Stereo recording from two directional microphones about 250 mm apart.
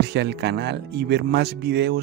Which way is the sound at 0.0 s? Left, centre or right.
Right.